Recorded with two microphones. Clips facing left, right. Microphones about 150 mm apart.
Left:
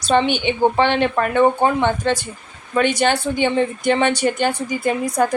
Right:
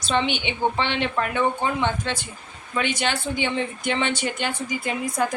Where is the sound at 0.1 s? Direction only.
45° left (ahead or behind).